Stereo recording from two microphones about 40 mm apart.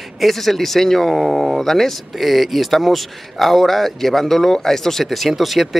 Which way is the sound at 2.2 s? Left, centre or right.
Centre.